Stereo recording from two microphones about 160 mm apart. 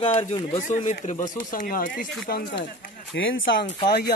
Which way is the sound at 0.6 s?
55° left (ahead or behind).